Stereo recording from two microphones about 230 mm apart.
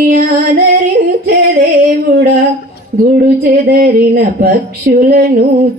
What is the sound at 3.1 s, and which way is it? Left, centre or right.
Speech, right.